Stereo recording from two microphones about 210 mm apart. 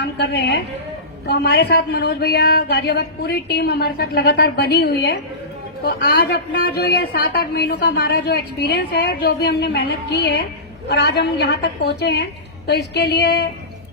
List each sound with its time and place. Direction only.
0.0 s a woman's voice: 55° left (ahead or behind)